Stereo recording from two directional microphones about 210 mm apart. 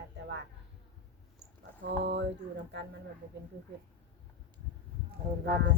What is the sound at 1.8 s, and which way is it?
Speech, 55° right (ahead or behind).